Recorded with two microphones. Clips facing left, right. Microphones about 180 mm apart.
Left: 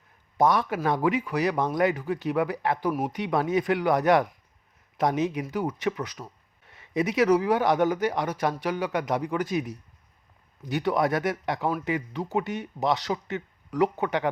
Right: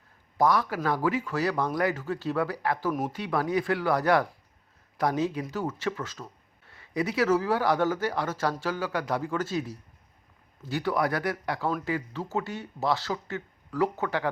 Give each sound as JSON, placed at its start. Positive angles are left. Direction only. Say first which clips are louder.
{"t": 0.3, "sound": "speech", "louder": "left 2 dB", "side_deg": 20}